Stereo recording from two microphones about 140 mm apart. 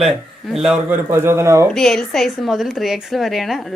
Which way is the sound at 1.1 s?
20° right (ahead or behind).